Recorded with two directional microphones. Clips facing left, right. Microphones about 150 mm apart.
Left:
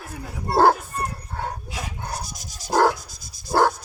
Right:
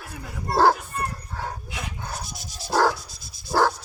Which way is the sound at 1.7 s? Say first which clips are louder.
Left 2 dB; 40° left (ahead or behind).